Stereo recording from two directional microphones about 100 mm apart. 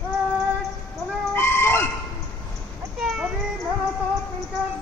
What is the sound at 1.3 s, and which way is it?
Chicken, 25° left (ahead or behind).